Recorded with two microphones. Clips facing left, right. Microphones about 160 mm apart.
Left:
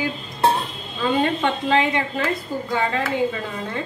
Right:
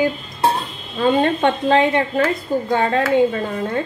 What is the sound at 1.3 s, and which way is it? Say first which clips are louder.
A woman's voice: right 4 dB; 50° right (ahead or behind).